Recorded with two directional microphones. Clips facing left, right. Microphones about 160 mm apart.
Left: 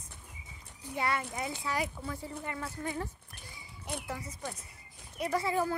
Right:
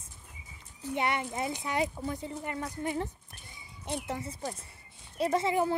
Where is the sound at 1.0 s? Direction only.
20° right (ahead or behind).